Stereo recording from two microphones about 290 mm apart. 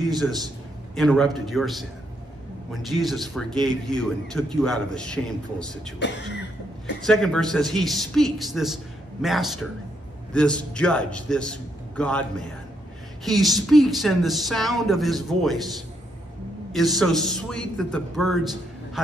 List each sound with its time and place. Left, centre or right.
0.9 s speech: centre
5.9 s a sound: left
7.0 s speech: centre
16.7 s speech: centre